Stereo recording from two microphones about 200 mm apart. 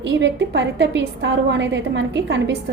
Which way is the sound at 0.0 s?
65° right (ahead or behind).